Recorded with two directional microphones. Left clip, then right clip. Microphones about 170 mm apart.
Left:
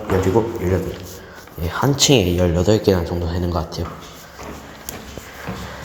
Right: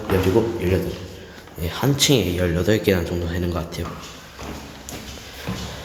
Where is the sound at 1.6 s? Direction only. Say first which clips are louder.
Left 4 dB; 5° left (ahead or behind).